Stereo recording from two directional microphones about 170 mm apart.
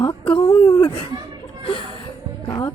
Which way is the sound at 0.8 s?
30° left (ahead or behind).